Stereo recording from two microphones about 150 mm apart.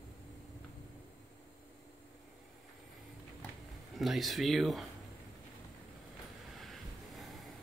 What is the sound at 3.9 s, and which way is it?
Speech, centre (ahead or behind).